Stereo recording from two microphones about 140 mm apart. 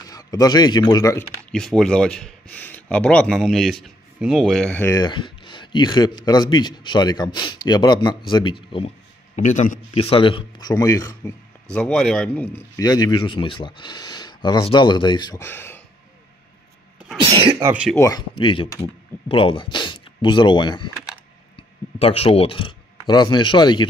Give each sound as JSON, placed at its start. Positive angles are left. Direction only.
{"t": 0.1, "sound": "a man's voice", "side_deg": 25}
{"t": 1.5, "sound": "speech", "side_deg": 5}
{"t": 4.9, "sound": "speech", "side_deg": 35}
{"t": 9.3, "sound": "a man's voice", "side_deg": 60}
{"t": 10.7, "sound": "speech", "side_deg": 25}
{"t": 11.7, "sound": "speech", "side_deg": 5}
{"t": 12.5, "sound": "speech", "side_deg": 25}
{"t": 15.3, "sound": "speech", "side_deg": 15}
{"t": 17.2, "sound": "speech", "side_deg": -40}
{"t": 17.9, "sound": "speech", "side_deg": 25}
{"t": 18.3, "sound": "speech", "side_deg": 35}
{"t": 21.9, "sound": "speech", "side_deg": 45}